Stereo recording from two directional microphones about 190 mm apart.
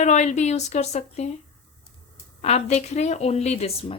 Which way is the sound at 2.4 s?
35° left (ahead or behind).